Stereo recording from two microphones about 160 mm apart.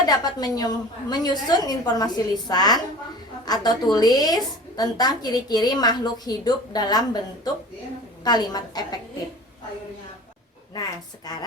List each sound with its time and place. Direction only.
0.0 s a woman's voice: 25° left (ahead or behind)